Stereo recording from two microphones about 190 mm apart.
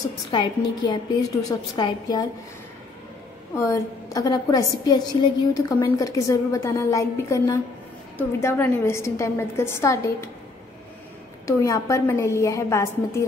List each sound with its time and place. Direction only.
0.3 s a woman's voice: 25° left (ahead or behind)
3.5 s a woman's voice: 15° left (ahead or behind)
11.4 s a woman's voice: 15° left (ahead or behind)